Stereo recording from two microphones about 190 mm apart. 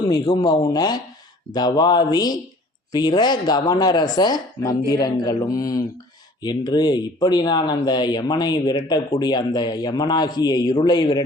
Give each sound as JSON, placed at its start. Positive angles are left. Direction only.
{"t": 0.1, "sound": "speech", "side_deg": 20}